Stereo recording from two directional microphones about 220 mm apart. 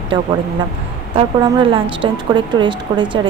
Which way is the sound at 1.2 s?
20° right (ahead or behind).